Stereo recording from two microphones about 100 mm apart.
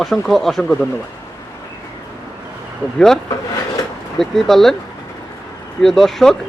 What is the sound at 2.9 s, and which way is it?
Speech, 5° left (ahead or behind).